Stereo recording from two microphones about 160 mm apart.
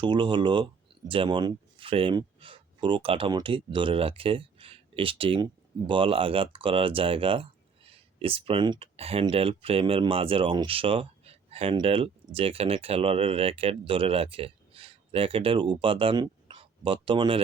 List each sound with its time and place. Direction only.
0.0 s speech: 30° right (ahead or behind)